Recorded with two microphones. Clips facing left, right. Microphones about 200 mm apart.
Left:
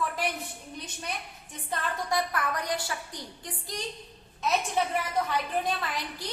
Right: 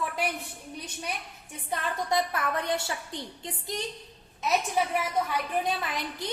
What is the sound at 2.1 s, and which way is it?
A woman's voice, 25° right (ahead or behind).